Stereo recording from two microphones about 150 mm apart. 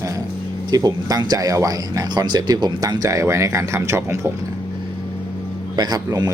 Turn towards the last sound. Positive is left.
turn(degrees=-25)  # may be behind; listen again after turning